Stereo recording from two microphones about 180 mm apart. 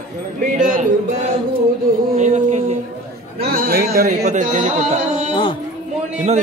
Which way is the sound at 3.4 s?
55° right (ahead or behind).